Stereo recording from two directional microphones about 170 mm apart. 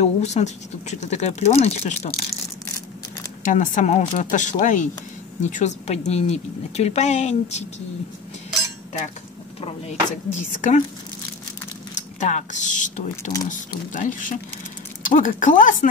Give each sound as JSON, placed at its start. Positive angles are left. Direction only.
{"t": 0.0, "sound": "a woman's voice", "side_deg": 40}
{"t": 3.4, "sound": "a woman's voice", "side_deg": 45}
{"t": 9.6, "sound": "speech", "side_deg": 45}
{"t": 12.2, "sound": "speech", "side_deg": 45}
{"t": 13.1, "sound": "speech", "side_deg": 20}
{"t": 13.5, "sound": "speech", "side_deg": 50}